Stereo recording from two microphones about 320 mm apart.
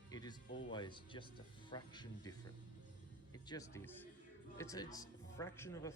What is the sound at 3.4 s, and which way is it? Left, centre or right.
Speech, centre.